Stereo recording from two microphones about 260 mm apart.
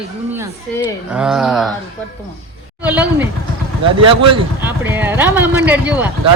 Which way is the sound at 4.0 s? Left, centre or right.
Right.